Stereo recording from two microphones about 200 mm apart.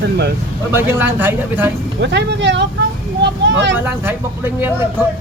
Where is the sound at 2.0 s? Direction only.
60° right (ahead or behind).